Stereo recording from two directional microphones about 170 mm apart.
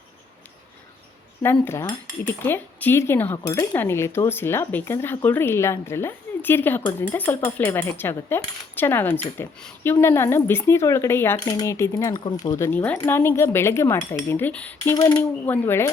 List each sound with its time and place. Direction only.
1.4 s speech: 15° left (ahead or behind)
14.9 s speech: 20° left (ahead or behind)